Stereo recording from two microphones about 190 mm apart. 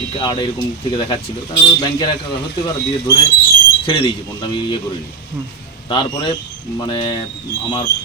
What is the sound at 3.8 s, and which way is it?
Speech, 25° left (ahead or behind).